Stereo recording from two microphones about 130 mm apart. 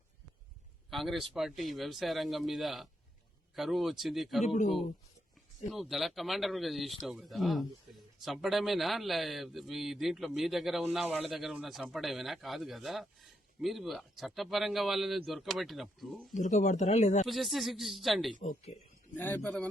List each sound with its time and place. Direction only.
0.9 s speech: centre (ahead or behind)
4.4 s speech: 65° left (ahead or behind)
5.7 s speech: centre (ahead or behind)
16.3 s speech: 70° left (ahead or behind)
17.2 s speech: centre (ahead or behind)
18.3 s a man's voice: 85° left
19.1 s a man's voice: 15° left (ahead or behind)